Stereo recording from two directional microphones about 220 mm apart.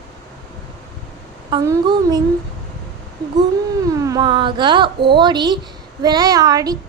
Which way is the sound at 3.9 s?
15° right (ahead or behind).